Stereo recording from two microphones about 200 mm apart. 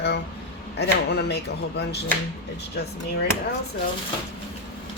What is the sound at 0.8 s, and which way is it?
Speech, 55° left (ahead or behind).